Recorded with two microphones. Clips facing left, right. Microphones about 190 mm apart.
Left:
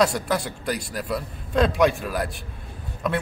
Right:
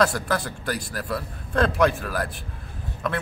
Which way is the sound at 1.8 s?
10° left (ahead or behind).